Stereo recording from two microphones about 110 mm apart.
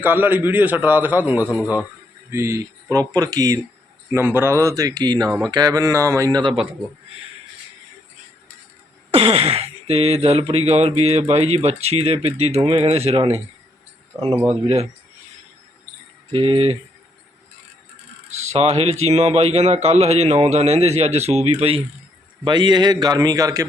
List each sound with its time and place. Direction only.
0.0 s a man's voice: 15° right (ahead or behind); by 3.6 s 35° right (ahead or behind)
4.1 s speech: 20° right (ahead or behind)
6.4 s a man's voice: 50° right (ahead or behind)
9.1 s a man's voice: 65° right (ahead or behind)
16.3 s keys jangling: 60° right (ahead or behind)
18.5 s a man's voice: 65° right (ahead or behind)
22.4 s speech: 45° right (ahead or behind)